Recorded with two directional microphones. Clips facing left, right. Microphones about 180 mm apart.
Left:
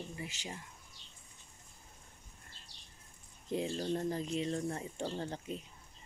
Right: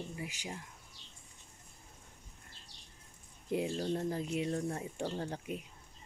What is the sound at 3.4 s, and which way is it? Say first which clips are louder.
Speech: right 1 dB; 10° right (ahead or behind).